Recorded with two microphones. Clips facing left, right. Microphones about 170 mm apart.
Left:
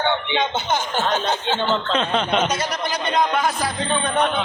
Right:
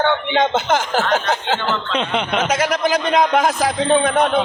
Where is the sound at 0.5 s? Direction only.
90° right.